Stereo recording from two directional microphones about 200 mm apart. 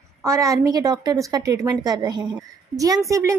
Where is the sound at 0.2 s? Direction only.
15° right (ahead or behind).